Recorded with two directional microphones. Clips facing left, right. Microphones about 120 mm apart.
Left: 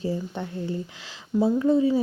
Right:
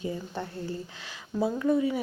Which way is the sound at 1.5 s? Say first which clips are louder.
Left 4 dB; 25° left (ahead or behind).